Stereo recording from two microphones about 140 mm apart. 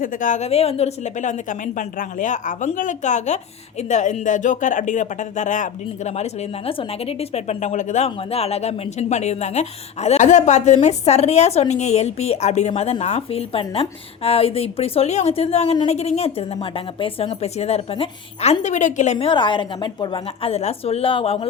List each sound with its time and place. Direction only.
0.0 s speech: 65° left (ahead or behind)
6.7 s speech: 45° left (ahead or behind)
18.6 s speech: 60° left (ahead or behind)
19.3 s a woman's voice: 35° left (ahead or behind)